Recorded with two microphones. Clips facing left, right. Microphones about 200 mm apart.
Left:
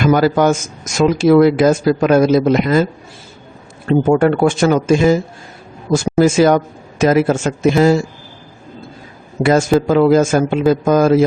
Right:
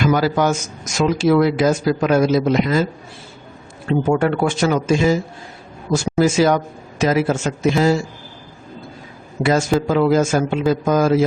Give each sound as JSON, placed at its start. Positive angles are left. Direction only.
{"t": 0.0, "sound": "a man's voice", "side_deg": 55}
{"t": 3.8, "sound": "a man's voice", "side_deg": 50}
{"t": 9.4, "sound": "a man's voice", "side_deg": 50}